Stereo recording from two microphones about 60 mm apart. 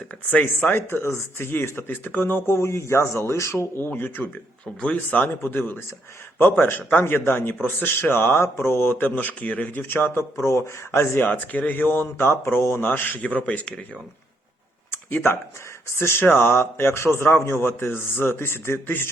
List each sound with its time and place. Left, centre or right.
0.3 s speech: left
0.8 s speech: left
3.8 s speech: left
4.8 s speech: left
6.4 s speech: left
7.0 s speech: left
10.2 s speech: left
11.3 s speech: left
12.8 s speech: left
13.2 s speech: left
14.8 s a sound: left
16.0 s speech: left